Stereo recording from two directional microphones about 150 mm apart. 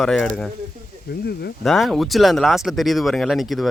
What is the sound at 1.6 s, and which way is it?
Speech, centre (ahead or behind).